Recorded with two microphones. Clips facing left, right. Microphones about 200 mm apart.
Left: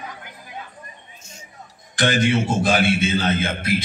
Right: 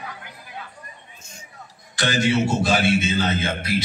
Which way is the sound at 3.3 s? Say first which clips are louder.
Left 2 dB; 55° left (ahead or behind).